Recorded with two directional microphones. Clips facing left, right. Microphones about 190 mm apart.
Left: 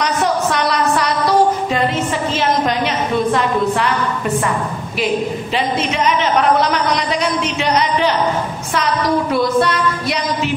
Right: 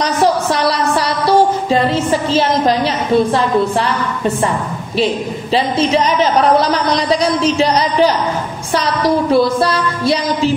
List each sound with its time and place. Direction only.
0.0 s music: 35° right (ahead or behind)
4.9 s a woman's voice: 30° right (ahead or behind)